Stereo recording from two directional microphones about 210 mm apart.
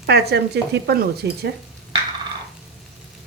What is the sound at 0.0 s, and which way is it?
Speech, 50° right (ahead or behind).